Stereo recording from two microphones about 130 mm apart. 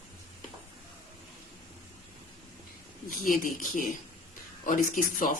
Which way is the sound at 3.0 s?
90° left.